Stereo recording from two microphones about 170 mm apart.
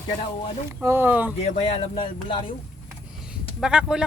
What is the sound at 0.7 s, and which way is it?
Speech, 15° right (ahead or behind).